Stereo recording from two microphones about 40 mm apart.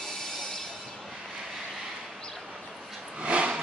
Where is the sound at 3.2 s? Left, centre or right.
Right.